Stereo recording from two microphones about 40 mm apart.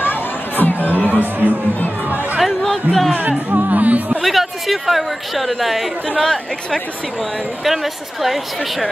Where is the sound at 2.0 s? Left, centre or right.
Right.